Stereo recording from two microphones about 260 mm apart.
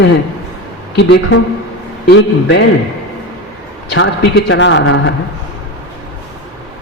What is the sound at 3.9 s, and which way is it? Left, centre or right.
A man's voice, left.